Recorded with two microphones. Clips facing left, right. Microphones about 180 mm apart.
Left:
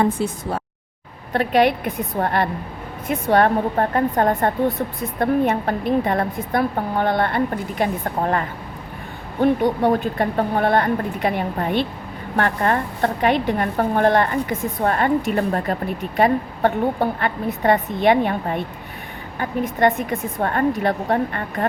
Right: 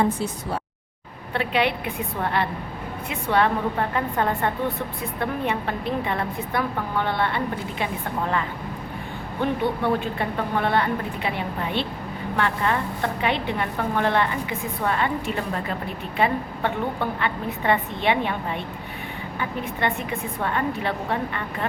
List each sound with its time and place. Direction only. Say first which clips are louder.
1.3 s a woman's voice: left 6 dB; 45° left (ahead or behind)